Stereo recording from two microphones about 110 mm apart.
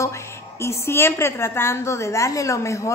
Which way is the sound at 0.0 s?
25° left (ahead or behind).